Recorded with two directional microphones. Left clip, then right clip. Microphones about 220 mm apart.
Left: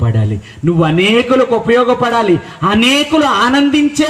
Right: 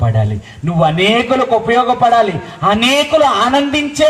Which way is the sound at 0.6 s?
50° right (ahead or behind).